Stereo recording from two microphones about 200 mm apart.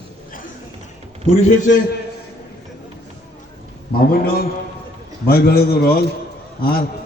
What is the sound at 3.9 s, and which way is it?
A man's voice, 50° left (ahead or behind).